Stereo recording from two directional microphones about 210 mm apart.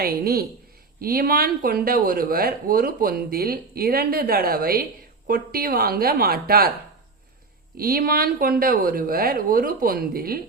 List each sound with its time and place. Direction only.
0.0 s speech: 45° right (ahead or behind)
7.8 s speech: 45° right (ahead or behind)